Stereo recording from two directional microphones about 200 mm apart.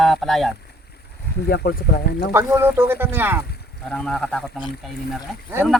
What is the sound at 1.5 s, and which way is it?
Speech, 55° left (ahead or behind).